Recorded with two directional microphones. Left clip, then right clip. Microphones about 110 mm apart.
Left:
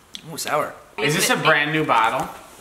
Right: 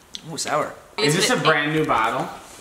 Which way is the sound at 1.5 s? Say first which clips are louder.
Left 3 dB; 30° left (ahead or behind).